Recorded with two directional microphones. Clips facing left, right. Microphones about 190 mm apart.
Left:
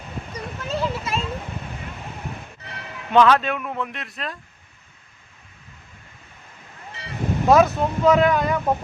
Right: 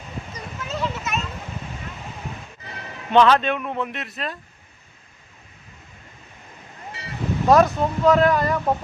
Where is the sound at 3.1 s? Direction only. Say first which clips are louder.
Even; 5° left (ahead or behind).